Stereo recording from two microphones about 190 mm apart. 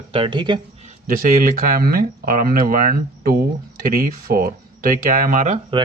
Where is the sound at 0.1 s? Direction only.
25° right (ahead or behind).